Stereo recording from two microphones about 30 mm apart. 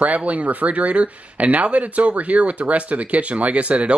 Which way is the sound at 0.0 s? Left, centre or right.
Right.